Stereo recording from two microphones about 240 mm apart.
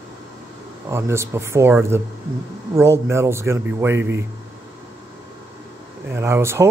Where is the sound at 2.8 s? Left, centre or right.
Centre.